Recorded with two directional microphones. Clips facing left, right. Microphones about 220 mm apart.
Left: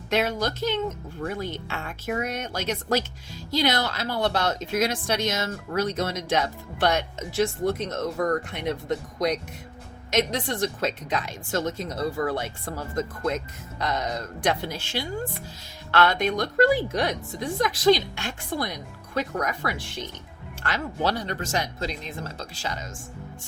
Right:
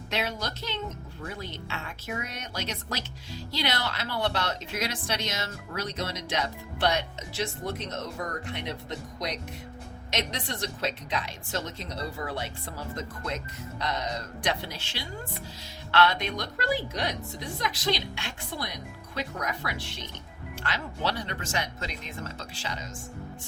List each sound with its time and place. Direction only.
0.1 s speech: 50° left (ahead or behind)